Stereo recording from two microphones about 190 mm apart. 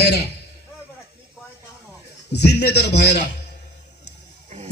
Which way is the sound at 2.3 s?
60° left (ahead or behind).